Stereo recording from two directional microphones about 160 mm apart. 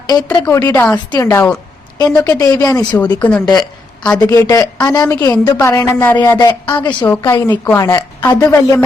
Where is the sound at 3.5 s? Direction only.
25° left (ahead or behind).